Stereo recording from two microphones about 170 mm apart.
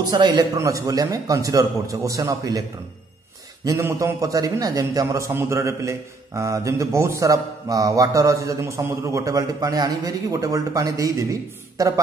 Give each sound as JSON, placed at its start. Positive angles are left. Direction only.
{"t": 0.0, "sound": "a man's voice", "side_deg": -25}
{"t": 3.6, "sound": "a man's voice", "side_deg": -20}